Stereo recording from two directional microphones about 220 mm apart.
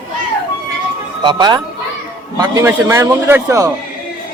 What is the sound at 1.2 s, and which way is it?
A man's voice, 20° right (ahead or behind).